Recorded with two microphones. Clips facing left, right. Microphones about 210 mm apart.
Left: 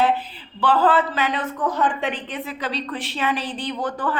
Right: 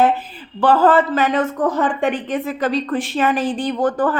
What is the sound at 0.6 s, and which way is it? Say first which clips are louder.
Speech: right 5 dB; 45° right (ahead or behind).